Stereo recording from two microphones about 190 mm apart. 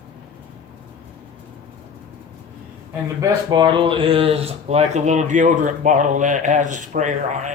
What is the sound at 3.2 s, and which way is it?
Speech, 25° right (ahead or behind).